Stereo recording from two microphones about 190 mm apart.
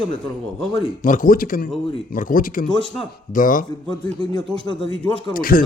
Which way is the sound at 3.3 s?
45° left (ahead or behind).